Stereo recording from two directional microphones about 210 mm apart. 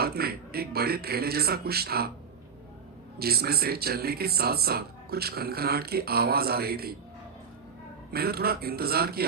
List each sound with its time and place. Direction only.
0.0 s speech: 45° right (ahead or behind)
3.2 s speech: 45° right (ahead or behind)
8.1 s speech: 45° right (ahead or behind)